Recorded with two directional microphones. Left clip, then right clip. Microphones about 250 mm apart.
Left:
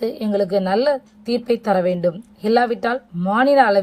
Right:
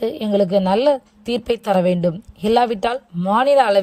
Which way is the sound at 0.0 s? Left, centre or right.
Right.